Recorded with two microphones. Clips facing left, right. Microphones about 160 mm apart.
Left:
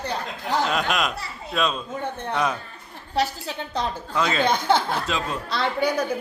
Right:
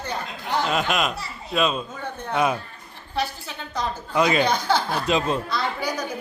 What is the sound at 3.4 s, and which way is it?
Speech, 25° left (ahead or behind).